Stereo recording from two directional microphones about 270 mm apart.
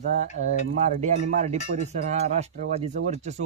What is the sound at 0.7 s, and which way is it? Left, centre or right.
Speech, right.